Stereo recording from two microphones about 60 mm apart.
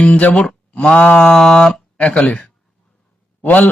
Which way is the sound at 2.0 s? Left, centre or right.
Centre.